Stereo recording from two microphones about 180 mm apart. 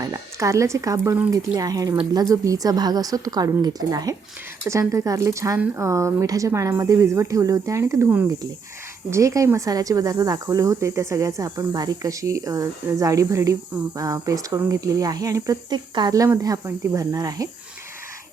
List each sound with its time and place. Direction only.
0.0 s speech: 20° right (ahead or behind)